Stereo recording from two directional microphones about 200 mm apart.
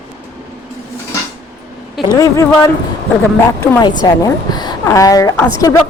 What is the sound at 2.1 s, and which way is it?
Speech, 15° left (ahead or behind).